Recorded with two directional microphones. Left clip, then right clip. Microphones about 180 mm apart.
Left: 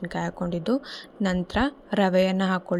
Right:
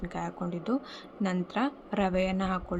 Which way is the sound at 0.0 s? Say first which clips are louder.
Left 5 dB; 30° left (ahead or behind).